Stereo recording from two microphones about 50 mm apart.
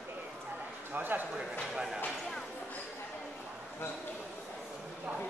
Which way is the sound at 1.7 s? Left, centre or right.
Centre.